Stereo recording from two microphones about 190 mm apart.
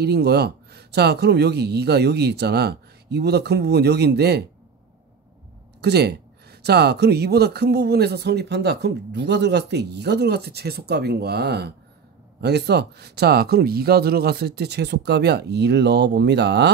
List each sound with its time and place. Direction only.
0.0 s speech: 60° right (ahead or behind)
5.8 s speech: 60° right (ahead or behind)